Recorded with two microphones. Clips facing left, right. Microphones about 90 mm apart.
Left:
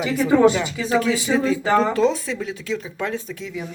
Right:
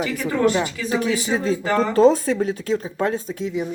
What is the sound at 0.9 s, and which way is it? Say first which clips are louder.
Speech: left 5 dB; 20° right (ahead or behind).